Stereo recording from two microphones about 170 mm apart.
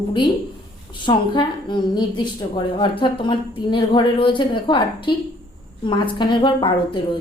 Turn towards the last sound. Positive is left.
turn(degrees=30)  # may be behind; listen again after turning